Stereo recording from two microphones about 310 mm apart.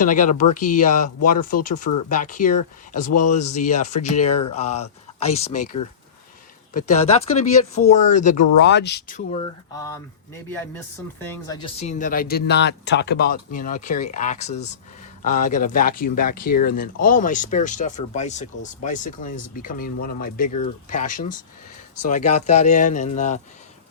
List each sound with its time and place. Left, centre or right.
0.0 s speech: left
6.7 s speech: left
9.7 s a sound: centre
11.2 s speech: centre